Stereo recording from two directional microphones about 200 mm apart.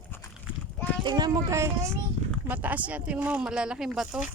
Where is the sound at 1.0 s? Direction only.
20° right (ahead or behind); by 4.3 s centre (ahead or behind).